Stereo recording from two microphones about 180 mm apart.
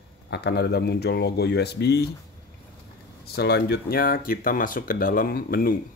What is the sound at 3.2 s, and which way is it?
Speech, 60° left (ahead or behind).